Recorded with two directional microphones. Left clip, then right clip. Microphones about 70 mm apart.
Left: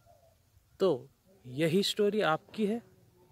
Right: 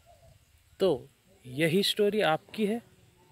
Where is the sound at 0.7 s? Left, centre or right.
Left.